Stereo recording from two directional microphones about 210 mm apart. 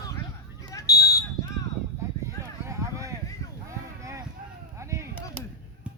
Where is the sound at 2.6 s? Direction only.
15° right (ahead or behind).